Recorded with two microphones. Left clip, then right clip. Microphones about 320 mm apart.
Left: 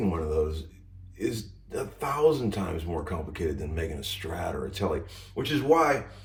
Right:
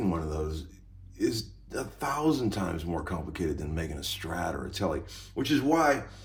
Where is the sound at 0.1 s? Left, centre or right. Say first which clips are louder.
Left 5 dB; centre.